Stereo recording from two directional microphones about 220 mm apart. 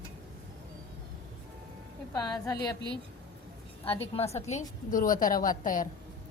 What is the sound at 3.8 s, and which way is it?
A woman's voice, 25° left (ahead or behind).